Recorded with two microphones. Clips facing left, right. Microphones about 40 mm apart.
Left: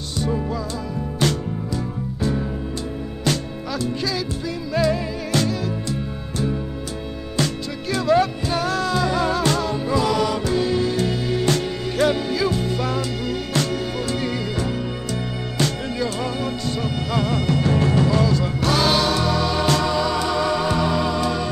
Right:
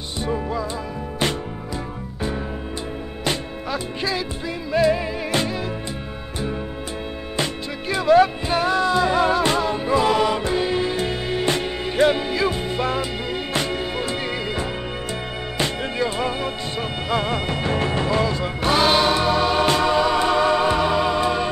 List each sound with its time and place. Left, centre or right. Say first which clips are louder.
0.2 s music: left 1 dB; centre
3.3 s music: left 1 dB; right
7.9 s music: right 3 dB; centre